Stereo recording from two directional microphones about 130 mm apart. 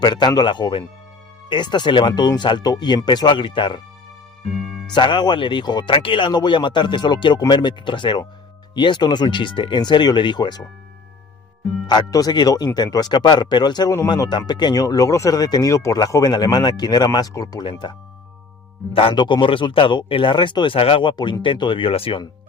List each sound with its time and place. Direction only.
0.0 s speech: 35° left (ahead or behind)
4.5 s speech: centre (ahead or behind)
4.9 s speech: 35° left (ahead or behind)
11.9 s speech: 30° left (ahead or behind)
18.9 s speech: 40° left (ahead or behind)